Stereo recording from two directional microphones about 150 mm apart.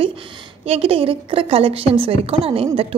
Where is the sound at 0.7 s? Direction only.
40° right (ahead or behind).